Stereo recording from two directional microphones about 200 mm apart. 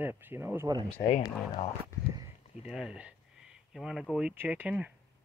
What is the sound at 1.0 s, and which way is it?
Speech, 25° left (ahead or behind).